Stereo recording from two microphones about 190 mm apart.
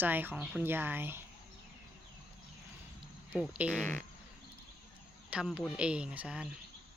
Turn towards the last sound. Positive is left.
turn(degrees=-5)  # may be behind; listen again after turning